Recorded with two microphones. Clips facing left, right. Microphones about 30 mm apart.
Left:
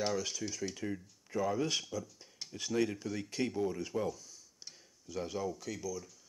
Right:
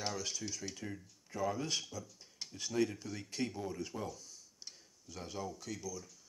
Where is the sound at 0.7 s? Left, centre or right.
Left.